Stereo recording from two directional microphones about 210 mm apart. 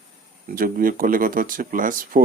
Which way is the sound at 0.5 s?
40° right (ahead or behind).